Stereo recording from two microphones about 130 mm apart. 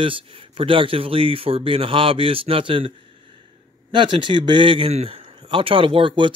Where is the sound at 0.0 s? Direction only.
45° right (ahead or behind).